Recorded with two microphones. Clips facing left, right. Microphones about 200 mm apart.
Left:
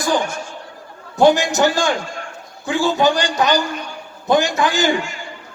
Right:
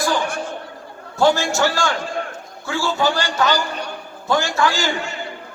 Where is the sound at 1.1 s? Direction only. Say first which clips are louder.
Left 3 dB; 15° left (ahead or behind).